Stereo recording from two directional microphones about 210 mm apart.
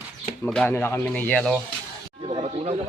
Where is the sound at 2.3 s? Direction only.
25° right (ahead or behind).